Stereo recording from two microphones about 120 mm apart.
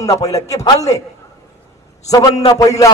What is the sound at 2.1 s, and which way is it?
Speech, 30° left (ahead or behind).